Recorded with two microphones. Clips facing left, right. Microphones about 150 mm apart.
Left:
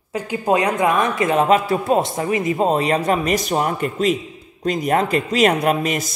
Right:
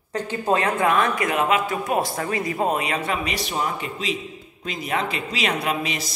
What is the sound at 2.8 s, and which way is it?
Speech, 40° left (ahead or behind).